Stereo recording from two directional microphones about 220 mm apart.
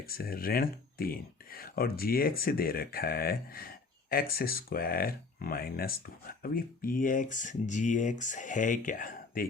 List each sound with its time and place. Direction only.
0.0 s speech: 40° left (ahead or behind)